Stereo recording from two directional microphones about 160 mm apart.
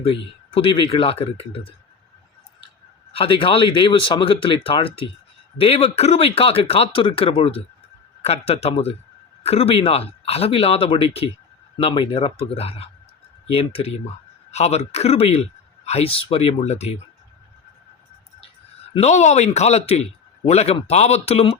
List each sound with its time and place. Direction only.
0.0 s speech: 35° left (ahead or behind)
3.1 s speech: 35° left (ahead or behind)
18.9 s speech: 45° left (ahead or behind)